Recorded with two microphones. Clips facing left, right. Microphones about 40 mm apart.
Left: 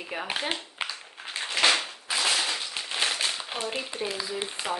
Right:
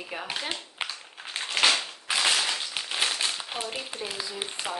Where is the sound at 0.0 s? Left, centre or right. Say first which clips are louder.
Left 2 dB; centre.